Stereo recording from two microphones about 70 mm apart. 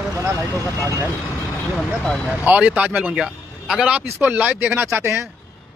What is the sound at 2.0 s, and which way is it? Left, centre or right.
Speech, centre.